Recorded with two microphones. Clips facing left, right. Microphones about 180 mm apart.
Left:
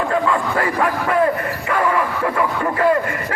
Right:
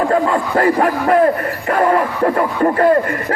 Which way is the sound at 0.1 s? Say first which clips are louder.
Right 4 dB; 40° right (ahead or behind).